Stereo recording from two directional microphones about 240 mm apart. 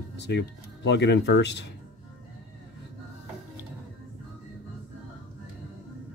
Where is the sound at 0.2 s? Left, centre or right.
Left.